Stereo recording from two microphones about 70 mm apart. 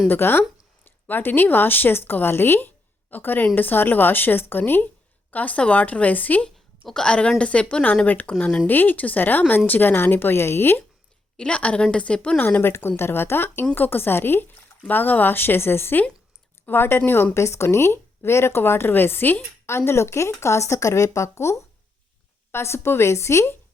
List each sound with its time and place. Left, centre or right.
0.1 s speech: left
6.8 s a woman's voice: centre
8.6 s speech: left
11.3 s a woman's voice: centre
12.4 s speech: left
17.3 s speech: left